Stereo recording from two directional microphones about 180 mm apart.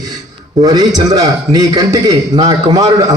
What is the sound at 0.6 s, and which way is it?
A man's voice, 20° right (ahead or behind).